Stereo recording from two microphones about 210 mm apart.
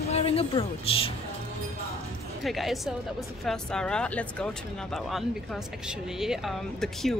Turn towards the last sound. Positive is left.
turn(degrees=0)  # may be behind; listen again after turning